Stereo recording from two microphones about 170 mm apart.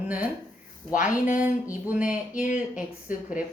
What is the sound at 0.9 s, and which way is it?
Speech, 50° left (ahead or behind).